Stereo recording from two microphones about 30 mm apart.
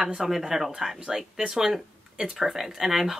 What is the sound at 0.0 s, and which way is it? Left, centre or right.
Speech, centre.